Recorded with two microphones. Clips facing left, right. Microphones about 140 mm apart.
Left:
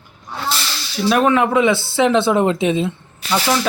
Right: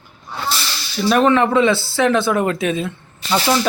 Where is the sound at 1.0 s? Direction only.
5° left (ahead or behind); by 2.9 s 25° left (ahead or behind).